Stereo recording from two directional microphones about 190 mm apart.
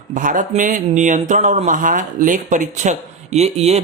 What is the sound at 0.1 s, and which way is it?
Speech, 45° right (ahead or behind).